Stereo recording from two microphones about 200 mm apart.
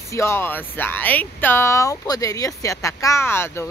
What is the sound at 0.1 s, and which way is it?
Speech, 15° left (ahead or behind).